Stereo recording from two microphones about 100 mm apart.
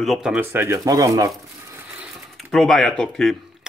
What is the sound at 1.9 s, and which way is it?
Mechanisms, 5° right (ahead or behind).